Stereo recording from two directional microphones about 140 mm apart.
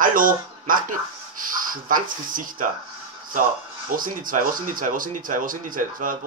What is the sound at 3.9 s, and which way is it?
Speech, 75° right (ahead or behind).